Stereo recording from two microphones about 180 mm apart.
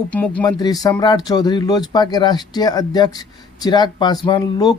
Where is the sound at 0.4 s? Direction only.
20° left (ahead or behind).